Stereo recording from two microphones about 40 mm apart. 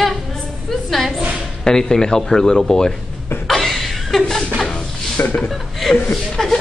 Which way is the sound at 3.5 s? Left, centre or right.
Centre.